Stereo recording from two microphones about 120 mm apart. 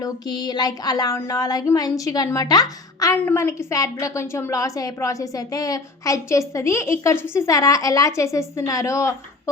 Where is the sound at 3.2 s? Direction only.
20° left (ahead or behind).